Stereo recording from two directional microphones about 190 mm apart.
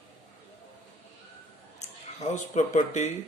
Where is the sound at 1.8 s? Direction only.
40° left (ahead or behind).